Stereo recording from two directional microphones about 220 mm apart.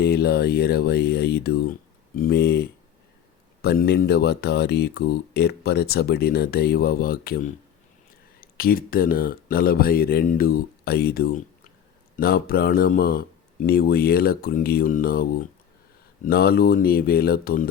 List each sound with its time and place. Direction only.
0.0 s speech: 45° left (ahead or behind)